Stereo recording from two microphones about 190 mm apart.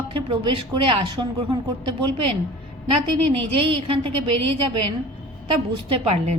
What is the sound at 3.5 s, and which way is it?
Speech, 30° right (ahead or behind).